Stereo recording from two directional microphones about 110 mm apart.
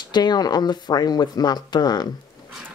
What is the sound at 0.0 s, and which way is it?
Speech, 40° left (ahead or behind).